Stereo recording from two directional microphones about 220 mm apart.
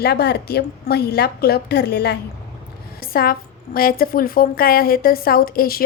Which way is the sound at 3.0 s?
40° left (ahead or behind).